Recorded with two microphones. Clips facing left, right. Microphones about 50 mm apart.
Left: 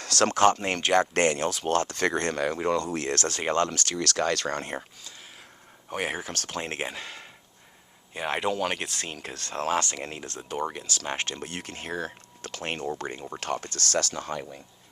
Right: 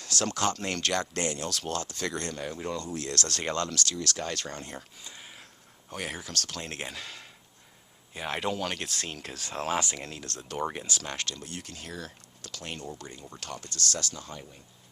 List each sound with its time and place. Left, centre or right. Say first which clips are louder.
0.0 s speech: left 7 dB; left
0.5 s speech: left 4 dB; centre
0.9 s speech: left 8 dB; left
2.3 s speech: left 8 dB; left
2.8 s speech: left 5 dB; left
3.9 s speech: left 7 dB; left
5.9 s speech: left 5 dB; left; by 10.0 s centre
10.0 s speech: left 4 dB; left
10.2 s speech: left 3 dB; centre
10.6 s speech: even; centre
11.0 s speech: left 4 dB; left
11.3 s speech: left 5 dB; left